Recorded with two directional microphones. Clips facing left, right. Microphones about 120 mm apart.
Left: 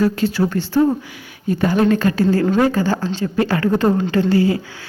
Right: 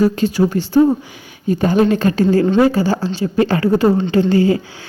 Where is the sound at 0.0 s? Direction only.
15° right (ahead or behind).